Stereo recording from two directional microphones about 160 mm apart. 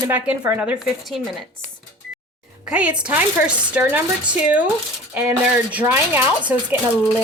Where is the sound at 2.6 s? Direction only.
5° right (ahead or behind).